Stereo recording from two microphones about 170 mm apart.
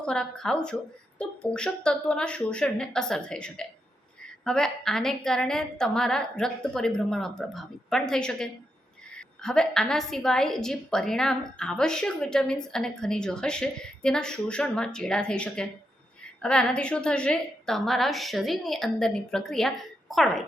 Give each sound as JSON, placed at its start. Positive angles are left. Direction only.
{"t": 0.0, "sound": "a woman's voice", "side_deg": 5}